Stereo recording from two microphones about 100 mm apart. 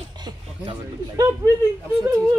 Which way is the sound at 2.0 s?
35° right (ahead or behind).